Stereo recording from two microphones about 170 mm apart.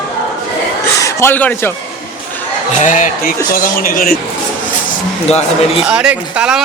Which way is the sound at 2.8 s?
50° left (ahead or behind).